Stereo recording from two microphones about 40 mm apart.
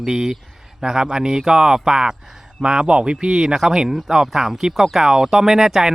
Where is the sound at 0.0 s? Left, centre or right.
Centre.